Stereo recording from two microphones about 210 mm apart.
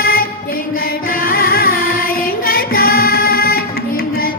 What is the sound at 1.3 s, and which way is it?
Music, 45° left (ahead or behind).